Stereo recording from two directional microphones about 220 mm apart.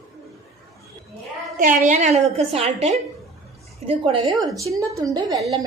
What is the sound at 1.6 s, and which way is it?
A woman's voice, 35° right (ahead or behind).